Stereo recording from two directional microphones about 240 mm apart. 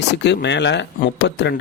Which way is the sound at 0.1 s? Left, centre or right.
Left.